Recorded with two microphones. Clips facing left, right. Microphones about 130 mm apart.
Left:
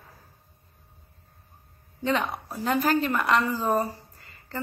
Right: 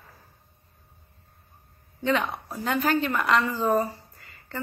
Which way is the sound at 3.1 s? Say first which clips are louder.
Even; 10° left (ahead or behind).